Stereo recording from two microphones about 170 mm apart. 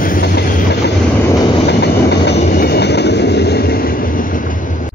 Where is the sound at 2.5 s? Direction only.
65° left (ahead or behind).